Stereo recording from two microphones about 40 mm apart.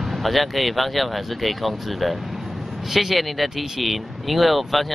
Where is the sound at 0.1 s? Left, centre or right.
Centre.